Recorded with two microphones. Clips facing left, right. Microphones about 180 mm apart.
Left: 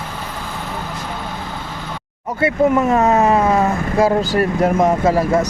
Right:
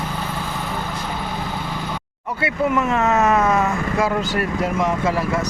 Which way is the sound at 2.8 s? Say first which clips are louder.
Left 4 dB; 35° left (ahead or behind).